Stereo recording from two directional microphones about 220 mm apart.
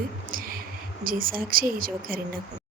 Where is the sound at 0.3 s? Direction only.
40° right (ahead or behind).